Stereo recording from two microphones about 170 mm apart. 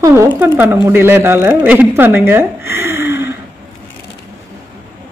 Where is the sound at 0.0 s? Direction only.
15° right (ahead or behind).